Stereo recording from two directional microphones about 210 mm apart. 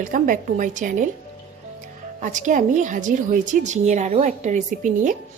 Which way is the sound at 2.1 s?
35° right (ahead or behind).